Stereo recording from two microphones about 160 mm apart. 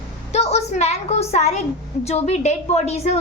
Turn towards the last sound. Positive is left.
turn(degrees=40)  # may be behind; listen again after turning